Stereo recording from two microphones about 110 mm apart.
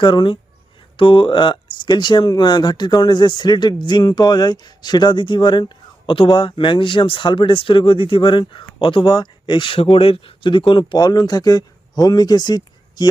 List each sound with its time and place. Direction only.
0.0 s speech: 50° left (ahead or behind)